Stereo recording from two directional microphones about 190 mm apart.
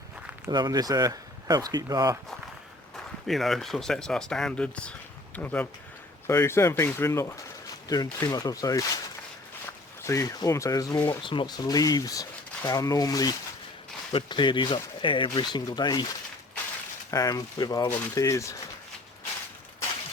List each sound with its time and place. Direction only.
0.4 s speech: 20° right (ahead or behind)
2.9 s speech: centre (ahead or behind); by 8.9 s 20° left (ahead or behind)
10.0 s speech: 15° left (ahead or behind)
17.1 s speech: 20° left (ahead or behind)